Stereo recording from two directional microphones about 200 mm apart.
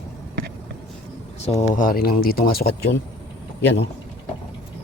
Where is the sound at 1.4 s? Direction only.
30° left (ahead or behind); by 3.0 s 50° left (ahead or behind).